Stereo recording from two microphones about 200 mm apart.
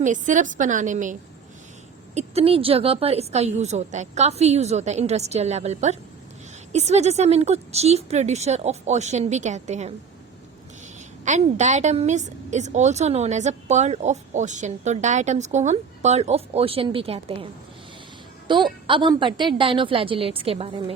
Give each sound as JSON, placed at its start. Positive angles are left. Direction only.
{"t": 0.0, "sound": "a woman's voice", "side_deg": -40}
{"t": 2.1, "sound": "a woman's voice", "side_deg": -30}
{"t": 11.3, "sound": "a woman's voice", "side_deg": -35}